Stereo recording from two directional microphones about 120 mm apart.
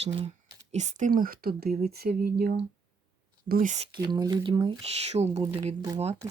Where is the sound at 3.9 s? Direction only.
35° right (ahead or behind).